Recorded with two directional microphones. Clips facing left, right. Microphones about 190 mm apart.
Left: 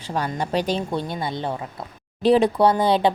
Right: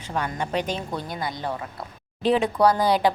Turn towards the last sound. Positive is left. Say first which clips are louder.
# left 2 dB
turn(degrees=25)  # may be behind; listen again after turning